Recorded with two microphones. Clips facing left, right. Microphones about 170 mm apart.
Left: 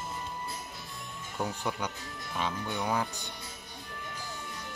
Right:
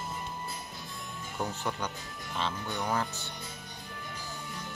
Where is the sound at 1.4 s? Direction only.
10° left (ahead or behind).